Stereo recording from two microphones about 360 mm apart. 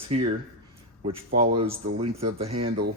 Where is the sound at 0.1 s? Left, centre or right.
Centre.